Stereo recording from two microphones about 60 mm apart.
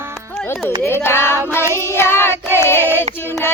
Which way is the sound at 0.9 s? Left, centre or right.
Left.